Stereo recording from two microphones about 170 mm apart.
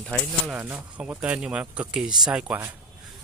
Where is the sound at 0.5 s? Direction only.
10° right (ahead or behind).